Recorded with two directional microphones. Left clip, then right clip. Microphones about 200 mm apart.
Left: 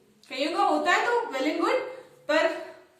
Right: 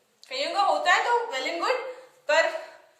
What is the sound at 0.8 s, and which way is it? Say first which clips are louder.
Speech: right 1 dB; 40° right (ahead or behind).